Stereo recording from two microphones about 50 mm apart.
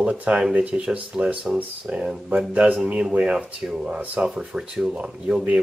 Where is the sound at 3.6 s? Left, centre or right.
Centre.